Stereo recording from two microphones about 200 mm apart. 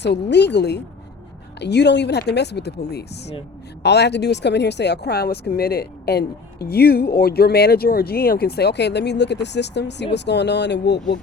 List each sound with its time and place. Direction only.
0.0 s speech: 60° left (ahead or behind)